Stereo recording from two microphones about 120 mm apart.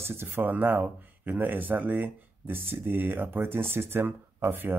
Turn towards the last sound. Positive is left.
turn(degrees=-15)  # may be behind; listen again after turning